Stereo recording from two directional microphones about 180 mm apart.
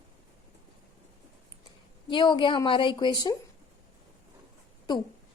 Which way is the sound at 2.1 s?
25° left (ahead or behind).